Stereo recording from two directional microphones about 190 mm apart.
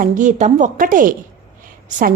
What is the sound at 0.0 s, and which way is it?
A woman's voice, 40° right (ahead or behind).